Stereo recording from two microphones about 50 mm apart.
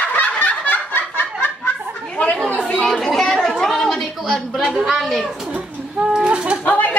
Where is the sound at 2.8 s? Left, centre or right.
Centre.